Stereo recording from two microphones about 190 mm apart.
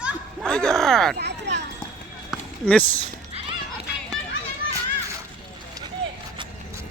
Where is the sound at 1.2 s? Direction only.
65° right (ahead or behind).